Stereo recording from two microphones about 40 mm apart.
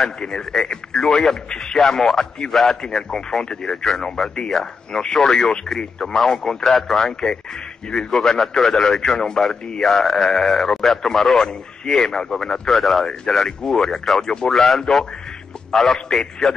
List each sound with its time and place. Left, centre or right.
0.0 s a man's voice: centre
2.8 s speech: centre
13.3 s a man's voice: centre